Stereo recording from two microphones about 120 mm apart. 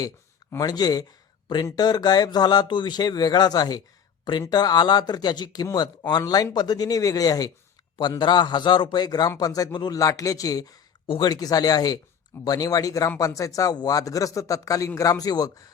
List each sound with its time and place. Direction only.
0.5 s speech: 35° left (ahead or behind)